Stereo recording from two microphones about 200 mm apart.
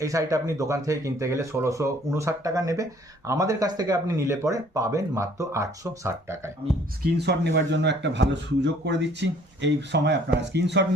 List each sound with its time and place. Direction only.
0.0 s speech: 15° right (ahead or behind)
7.0 s a man's voice: 55° right (ahead or behind)